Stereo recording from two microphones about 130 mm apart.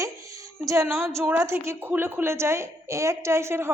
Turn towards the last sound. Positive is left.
turn(degrees=-20)  # may be behind; listen again after turning